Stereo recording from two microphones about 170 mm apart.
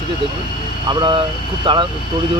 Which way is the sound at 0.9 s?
30° right (ahead or behind).